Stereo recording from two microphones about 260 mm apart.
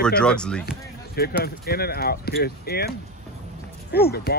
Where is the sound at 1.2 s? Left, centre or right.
Left.